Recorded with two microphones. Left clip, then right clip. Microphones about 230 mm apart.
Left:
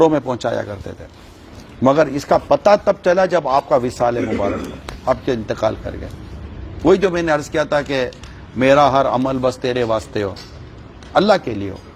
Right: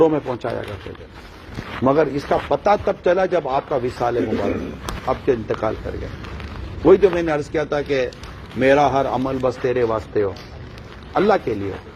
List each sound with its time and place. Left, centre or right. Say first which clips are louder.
0.0 s a man's voice: left 3 dB; left
1.8 s speech: left 3 dB; left
6.8 s a man's voice: even; left